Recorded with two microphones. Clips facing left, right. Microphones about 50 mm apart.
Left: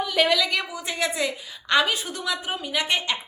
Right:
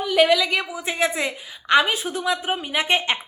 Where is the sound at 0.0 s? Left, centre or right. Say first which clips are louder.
Right 4 dB; centre.